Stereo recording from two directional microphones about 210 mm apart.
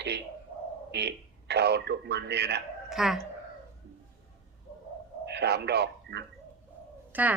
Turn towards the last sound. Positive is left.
turn(degrees=-10)  # may be behind; listen again after turning